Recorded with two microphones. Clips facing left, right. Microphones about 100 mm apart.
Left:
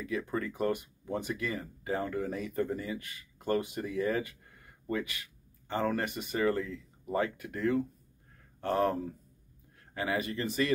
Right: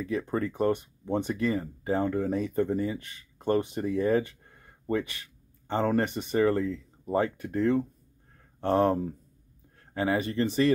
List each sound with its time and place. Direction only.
0.0 s speech: 30° right (ahead or behind)